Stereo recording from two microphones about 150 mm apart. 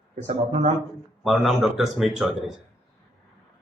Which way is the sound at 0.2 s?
50° right (ahead or behind).